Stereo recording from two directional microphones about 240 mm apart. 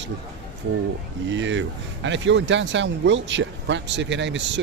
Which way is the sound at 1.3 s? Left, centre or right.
Right.